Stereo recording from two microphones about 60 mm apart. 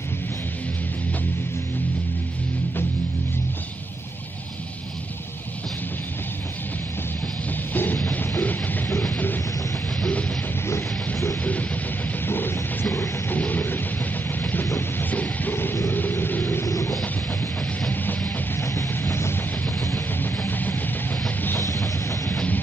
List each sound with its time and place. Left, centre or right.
7.7 s music: left
11.4 s a sound: left
12.3 s music: left
13.3 s a sound: left
15.0 s music: left
15.9 s vehicle: left
18.6 s music: left
20.2 s music: left
21.5 s music: left